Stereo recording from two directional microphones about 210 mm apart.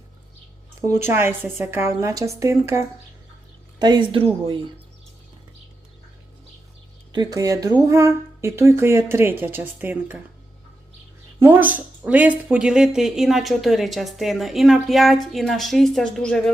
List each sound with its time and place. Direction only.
1.0 s a woman's voice: 10° right (ahead or behind)
7.1 s a woman's voice: 20° right (ahead or behind)
11.3 s a woman's voice: 10° right (ahead or behind)